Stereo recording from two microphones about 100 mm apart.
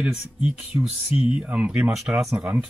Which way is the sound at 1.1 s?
70° left (ahead or behind).